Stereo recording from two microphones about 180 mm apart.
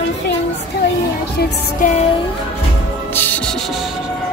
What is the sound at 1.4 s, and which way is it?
Speech, 60° left (ahead or behind).